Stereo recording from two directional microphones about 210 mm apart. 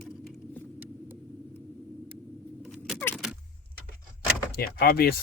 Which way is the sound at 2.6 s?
Centre (ahead or behind).